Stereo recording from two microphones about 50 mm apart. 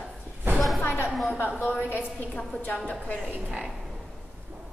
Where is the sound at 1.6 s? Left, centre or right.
Left.